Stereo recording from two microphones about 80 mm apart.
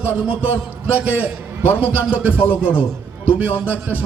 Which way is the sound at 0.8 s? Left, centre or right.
Right.